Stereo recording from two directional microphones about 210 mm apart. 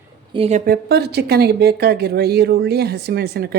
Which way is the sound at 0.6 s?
50° right (ahead or behind).